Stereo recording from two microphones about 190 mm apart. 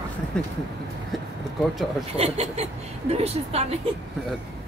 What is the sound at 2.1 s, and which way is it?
Speech, 35° right (ahead or behind).